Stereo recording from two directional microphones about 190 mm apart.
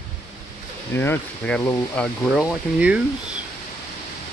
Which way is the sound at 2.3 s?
5° right (ahead or behind).